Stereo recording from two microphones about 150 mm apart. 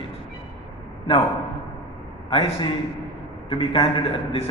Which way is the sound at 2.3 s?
35° left (ahead or behind).